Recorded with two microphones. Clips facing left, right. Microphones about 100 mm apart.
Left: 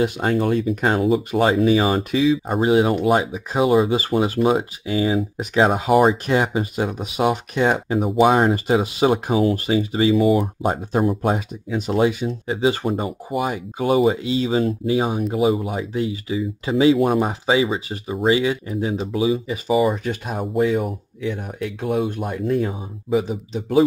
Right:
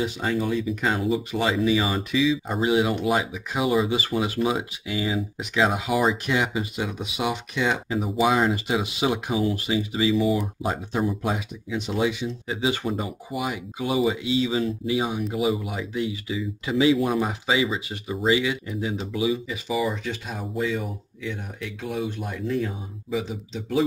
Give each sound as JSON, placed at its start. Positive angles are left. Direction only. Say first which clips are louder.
{"t": 0.0, "sound": "speech", "louder": "left 6 dB", "side_deg": 55}